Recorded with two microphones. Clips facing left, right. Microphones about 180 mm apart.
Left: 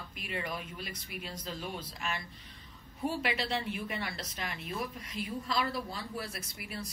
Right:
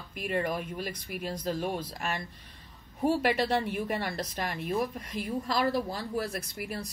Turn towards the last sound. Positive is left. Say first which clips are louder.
# right 6 dB
turn(degrees=-45)  # may be behind; listen again after turning